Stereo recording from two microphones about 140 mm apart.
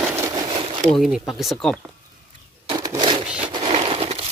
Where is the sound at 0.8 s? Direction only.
Centre (ahead or behind).